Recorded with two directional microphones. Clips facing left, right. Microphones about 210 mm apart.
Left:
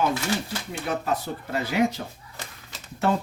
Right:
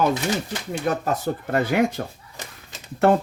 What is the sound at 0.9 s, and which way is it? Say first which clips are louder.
Speech: right 4 dB; 45° right (ahead or behind).